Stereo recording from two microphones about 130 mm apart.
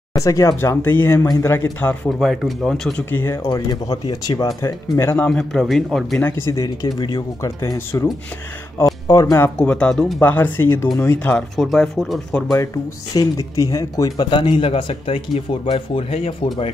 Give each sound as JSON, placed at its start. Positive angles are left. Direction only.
{"t": 0.2, "sound": "speech", "side_deg": 25}
{"t": 2.0, "sound": "speech", "side_deg": 0}
{"t": 3.1, "sound": "speech", "side_deg": 15}
{"t": 3.4, "sound": "speech", "side_deg": 30}
{"t": 5.4, "sound": "speech", "side_deg": 0}
{"t": 6.2, "sound": "speech", "side_deg": 20}
{"t": 9.6, "sound": "speech", "side_deg": 10}
{"t": 10.3, "sound": "speech", "side_deg": 15}
{"t": 12.4, "sound": "speech", "side_deg": 25}